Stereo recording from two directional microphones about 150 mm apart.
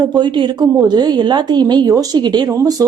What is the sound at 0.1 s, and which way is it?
A woman's voice, 25° right (ahead or behind).